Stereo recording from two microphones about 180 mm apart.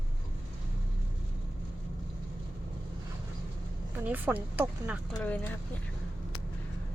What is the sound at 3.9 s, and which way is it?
Speech, 10° right (ahead or behind).